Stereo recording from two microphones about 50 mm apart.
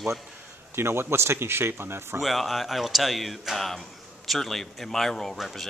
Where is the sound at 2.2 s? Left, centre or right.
Centre.